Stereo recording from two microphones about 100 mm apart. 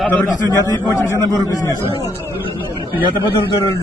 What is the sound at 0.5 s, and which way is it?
A man's voice, 30° left (ahead or behind).